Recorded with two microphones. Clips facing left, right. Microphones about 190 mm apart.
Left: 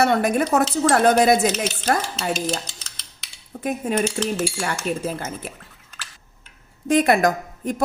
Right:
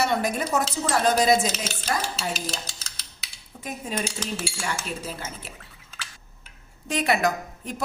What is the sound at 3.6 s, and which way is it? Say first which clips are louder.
Speech: left 8 dB; 60° left (ahead or behind).